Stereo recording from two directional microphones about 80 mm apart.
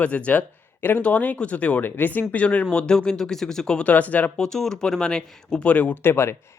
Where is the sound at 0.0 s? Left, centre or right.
Centre.